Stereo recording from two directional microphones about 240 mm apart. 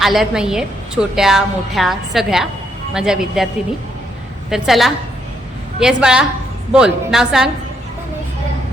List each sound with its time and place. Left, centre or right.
0.0 s a woman's voice: centre